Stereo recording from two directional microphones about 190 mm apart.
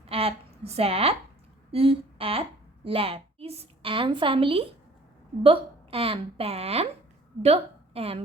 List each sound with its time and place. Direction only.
0.0 s a woman's voice: 30° right (ahead or behind)